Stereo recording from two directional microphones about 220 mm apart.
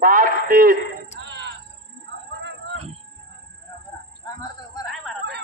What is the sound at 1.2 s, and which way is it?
Music, 50° right (ahead or behind).